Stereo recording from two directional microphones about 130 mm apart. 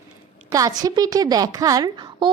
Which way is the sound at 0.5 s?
30° right (ahead or behind).